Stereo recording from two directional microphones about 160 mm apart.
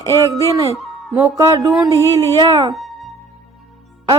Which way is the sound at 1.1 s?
15° right (ahead or behind).